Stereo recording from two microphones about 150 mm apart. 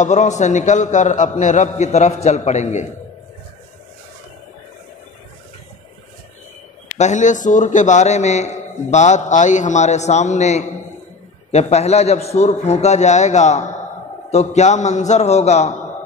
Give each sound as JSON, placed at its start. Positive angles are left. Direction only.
{"t": 0.0, "sound": "a man's voice", "side_deg": 50}
{"t": 7.0, "sound": "a man's voice", "side_deg": 55}